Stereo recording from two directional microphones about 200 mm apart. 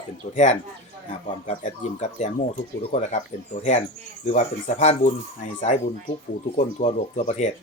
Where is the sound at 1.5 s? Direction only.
35° left (ahead or behind).